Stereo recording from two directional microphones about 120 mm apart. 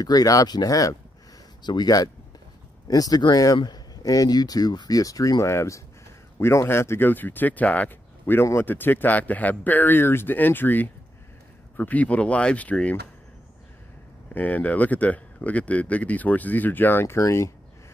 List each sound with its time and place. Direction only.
0.0 s speech: 30° left (ahead or behind); by 12.9 s 10° left (ahead or behind)
14.3 s speech: 15° left (ahead or behind)